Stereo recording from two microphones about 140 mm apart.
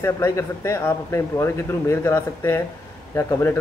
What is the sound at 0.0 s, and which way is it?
Speech, 20° left (ahead or behind).